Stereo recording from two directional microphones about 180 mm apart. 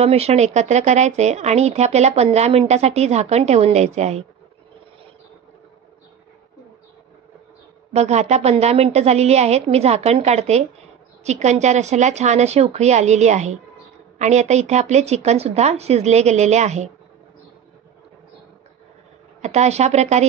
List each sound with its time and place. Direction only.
0.0 s speech: 35° right (ahead or behind)
7.9 s speech: 35° right (ahead or behind)
19.4 s speech: 40° right (ahead or behind)